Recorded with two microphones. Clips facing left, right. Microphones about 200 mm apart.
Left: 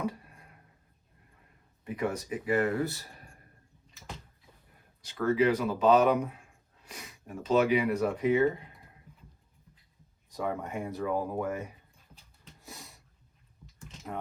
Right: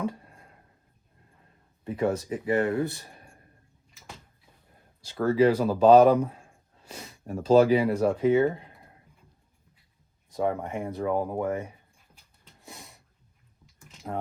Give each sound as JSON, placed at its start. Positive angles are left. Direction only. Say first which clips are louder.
{"t": 1.8, "sound": "speech", "louder": "right 5 dB", "side_deg": -30}
{"t": 5.0, "sound": "speech", "louder": "right 4 dB", "side_deg": -30}
{"t": 10.2, "sound": "speech", "louder": "right 6 dB", "side_deg": -30}
{"t": 14.0, "sound": "speech", "louder": "right 5 dB", "side_deg": -40}